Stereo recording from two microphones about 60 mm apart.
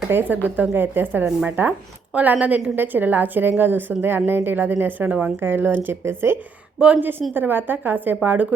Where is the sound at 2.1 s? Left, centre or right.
Right.